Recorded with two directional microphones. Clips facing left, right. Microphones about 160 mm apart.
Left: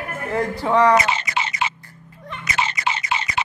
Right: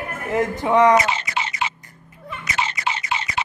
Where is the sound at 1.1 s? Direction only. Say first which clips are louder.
Left 1 dB; 75° left (ahead or behind).